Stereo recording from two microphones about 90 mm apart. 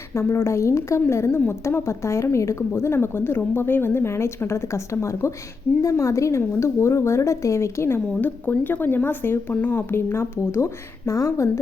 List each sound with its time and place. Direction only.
0.1 s a woman's voice: 30° left (ahead or behind)